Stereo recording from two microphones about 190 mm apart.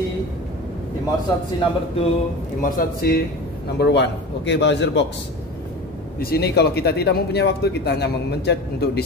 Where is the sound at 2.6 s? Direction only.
50° left (ahead or behind).